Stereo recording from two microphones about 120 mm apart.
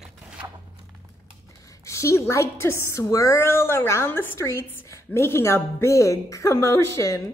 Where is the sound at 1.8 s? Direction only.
25° left (ahead or behind).